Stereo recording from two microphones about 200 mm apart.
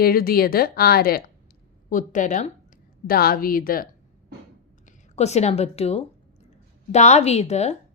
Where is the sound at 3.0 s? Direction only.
50° left (ahead or behind).